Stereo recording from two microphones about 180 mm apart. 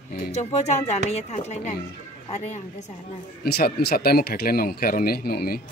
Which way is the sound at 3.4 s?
60° left (ahead or behind).